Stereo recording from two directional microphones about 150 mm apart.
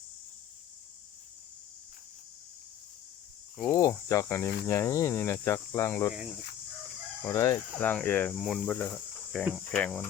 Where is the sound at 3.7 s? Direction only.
20° left (ahead or behind).